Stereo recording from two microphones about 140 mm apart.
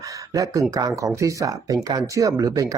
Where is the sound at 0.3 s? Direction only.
25° right (ahead or behind).